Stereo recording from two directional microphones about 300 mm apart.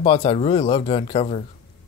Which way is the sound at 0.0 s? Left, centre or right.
Centre.